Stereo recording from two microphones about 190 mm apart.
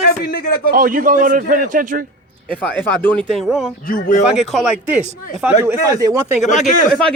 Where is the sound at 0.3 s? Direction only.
50° left (ahead or behind).